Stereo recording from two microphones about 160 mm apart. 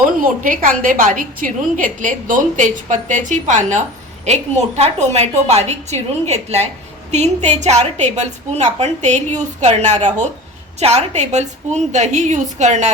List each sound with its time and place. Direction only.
0.2 s a woman's voice: 60° right (ahead or behind)